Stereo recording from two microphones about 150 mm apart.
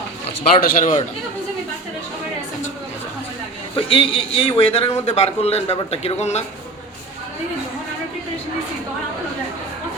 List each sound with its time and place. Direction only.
0.6 s speech: 65° left (ahead or behind)
3.8 s a man's voice: 35° left (ahead or behind)